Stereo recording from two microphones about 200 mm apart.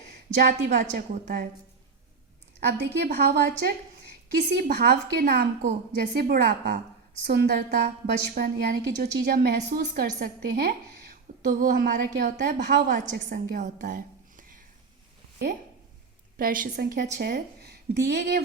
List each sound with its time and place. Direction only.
0.3 s a woman's voice: 40° right (ahead or behind)
2.6 s a woman's voice: 55° right (ahead or behind)
16.4 s a woman's voice: 45° right (ahead or behind)